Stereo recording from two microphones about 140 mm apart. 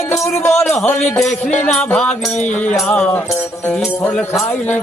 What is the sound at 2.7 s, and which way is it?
Speech, 5° left (ahead or behind).